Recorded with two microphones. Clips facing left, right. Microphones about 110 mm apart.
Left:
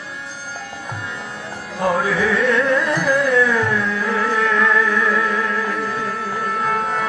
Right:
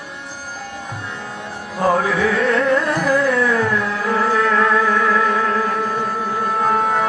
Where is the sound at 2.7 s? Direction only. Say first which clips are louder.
Right 1 dB; 50° right (ahead or behind).